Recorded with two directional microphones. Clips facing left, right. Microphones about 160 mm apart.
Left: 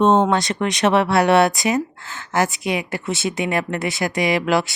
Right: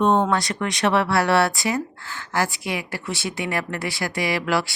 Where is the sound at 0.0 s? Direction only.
20° left (ahead or behind).